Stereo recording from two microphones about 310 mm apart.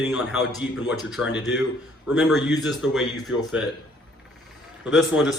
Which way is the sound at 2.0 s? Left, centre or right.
Centre.